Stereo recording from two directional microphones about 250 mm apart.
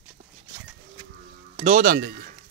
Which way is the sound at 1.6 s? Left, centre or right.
Right.